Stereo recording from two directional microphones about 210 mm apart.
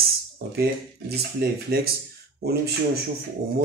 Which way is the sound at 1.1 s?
50° right (ahead or behind).